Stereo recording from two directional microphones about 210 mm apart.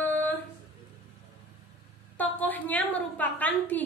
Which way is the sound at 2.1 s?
10° left (ahead or behind).